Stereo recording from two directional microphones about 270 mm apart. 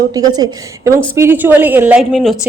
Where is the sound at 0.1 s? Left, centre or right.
Centre.